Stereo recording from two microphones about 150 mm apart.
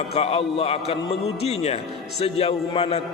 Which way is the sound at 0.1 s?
40° left (ahead or behind).